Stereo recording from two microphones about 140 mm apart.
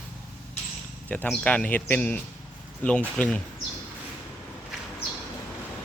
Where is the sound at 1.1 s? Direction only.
10° left (ahead or behind).